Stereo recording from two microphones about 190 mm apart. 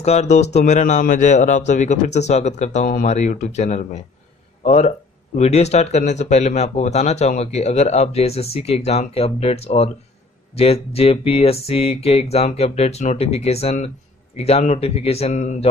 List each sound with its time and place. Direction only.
0.0 s speech: 35° left (ahead or behind)